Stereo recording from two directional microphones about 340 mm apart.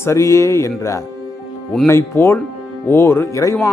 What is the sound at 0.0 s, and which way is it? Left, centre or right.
Speech, centre.